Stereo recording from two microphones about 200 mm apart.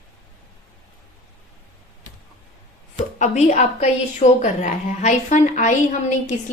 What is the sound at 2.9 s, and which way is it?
A woman's voice, 35° left (ahead or behind).